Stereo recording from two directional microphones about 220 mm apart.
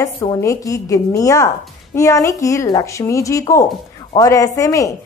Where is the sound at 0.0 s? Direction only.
15° left (ahead or behind).